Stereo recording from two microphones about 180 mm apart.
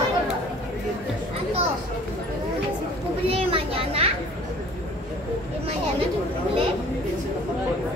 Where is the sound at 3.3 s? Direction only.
30° right (ahead or behind).